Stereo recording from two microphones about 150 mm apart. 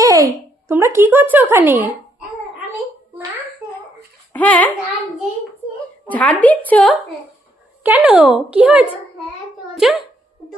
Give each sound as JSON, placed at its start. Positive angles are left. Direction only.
{"t": 0.0, "sound": "a child's voice", "side_deg": -20}
{"t": 4.3, "sound": "speech", "side_deg": 10}
{"t": 6.1, "sound": "a woman's voice", "side_deg": 10}
{"t": 7.9, "sound": "a child's voice", "side_deg": -5}